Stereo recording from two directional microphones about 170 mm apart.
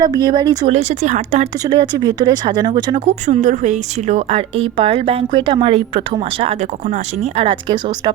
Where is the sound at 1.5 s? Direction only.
25° right (ahead or behind).